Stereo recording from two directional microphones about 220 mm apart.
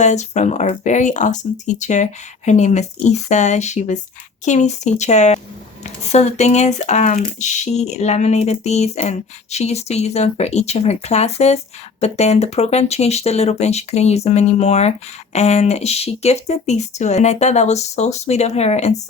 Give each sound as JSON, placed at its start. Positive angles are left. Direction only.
{"t": 0.0, "sound": "speech", "side_deg": 30}